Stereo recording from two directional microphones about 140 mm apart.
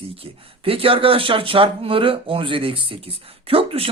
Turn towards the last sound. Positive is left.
turn(degrees=-40)  # may be behind; listen again after turning